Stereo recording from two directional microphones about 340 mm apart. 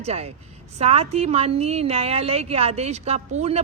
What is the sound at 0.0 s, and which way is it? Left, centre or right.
Speech, centre.